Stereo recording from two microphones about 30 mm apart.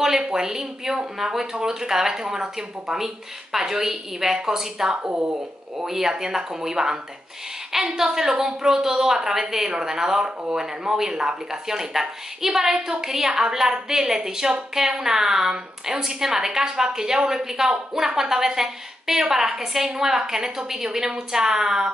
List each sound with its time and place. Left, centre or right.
0.3 s a woman's voice: right
4.9 s speech: right
5.9 s speech: centre
8.0 s a woman's voice: centre